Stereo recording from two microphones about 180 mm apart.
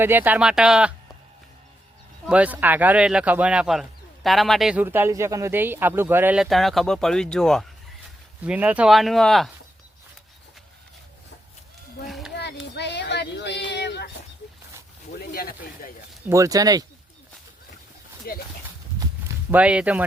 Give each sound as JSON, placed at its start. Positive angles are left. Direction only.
{"t": 0.0, "sound": "speech", "side_deg": -10}
{"t": 2.2, "sound": "speech", "side_deg": -5}
{"t": 8.4, "sound": "speech", "side_deg": -5}
{"t": 12.0, "sound": "a sound", "side_deg": 0}
{"t": 12.3, "sound": "a sound", "side_deg": 70}
{"t": 13.7, "sound": "child singing", "side_deg": 70}
{"t": 15.1, "sound": "a sound", "side_deg": 55}
{"t": 16.3, "sound": "speech", "side_deg": -20}
{"t": 18.3, "sound": "speech", "side_deg": 55}
{"t": 18.9, "sound": "walk", "side_deg": -15}